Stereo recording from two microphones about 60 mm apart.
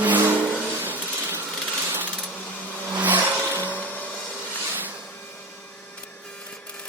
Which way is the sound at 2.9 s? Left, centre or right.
Right.